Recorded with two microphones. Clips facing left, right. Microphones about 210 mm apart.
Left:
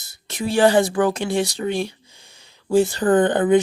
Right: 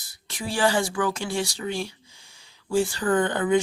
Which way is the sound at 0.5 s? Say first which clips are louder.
Left 7 dB; 55° left (ahead or behind).